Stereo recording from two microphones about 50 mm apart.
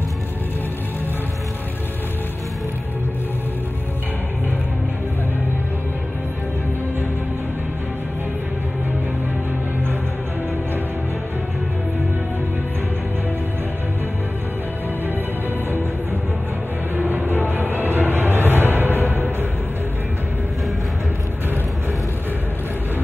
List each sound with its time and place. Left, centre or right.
16.9 s music: right